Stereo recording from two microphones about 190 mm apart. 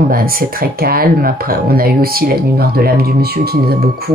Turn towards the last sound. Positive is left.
turn(degrees=-55)  # may be behind; listen again after turning